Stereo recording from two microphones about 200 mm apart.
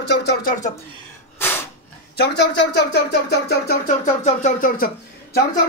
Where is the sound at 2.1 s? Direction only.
55° left (ahead or behind).